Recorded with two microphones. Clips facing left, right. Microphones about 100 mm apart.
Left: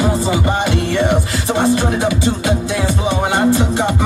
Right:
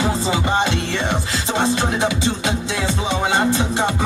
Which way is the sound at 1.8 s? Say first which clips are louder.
Left 3 dB; 20° right (ahead or behind).